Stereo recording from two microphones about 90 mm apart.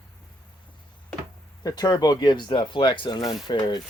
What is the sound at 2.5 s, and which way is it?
Speech, 65° left (ahead or behind).